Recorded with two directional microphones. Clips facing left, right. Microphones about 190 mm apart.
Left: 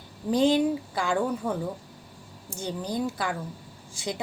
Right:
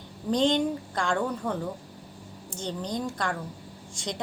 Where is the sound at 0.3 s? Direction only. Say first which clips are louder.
Left 2 dB; 5° left (ahead or behind).